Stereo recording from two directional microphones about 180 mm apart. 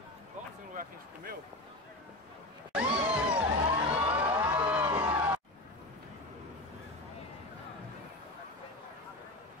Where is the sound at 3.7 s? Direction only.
30° right (ahead or behind).